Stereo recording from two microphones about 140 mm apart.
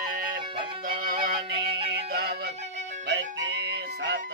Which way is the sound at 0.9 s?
90° right.